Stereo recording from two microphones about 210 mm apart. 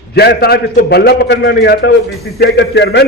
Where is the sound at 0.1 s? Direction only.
50° left (ahead or behind).